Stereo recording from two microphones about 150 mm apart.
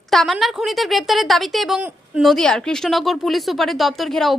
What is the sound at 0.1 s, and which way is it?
Speech, centre (ahead or behind).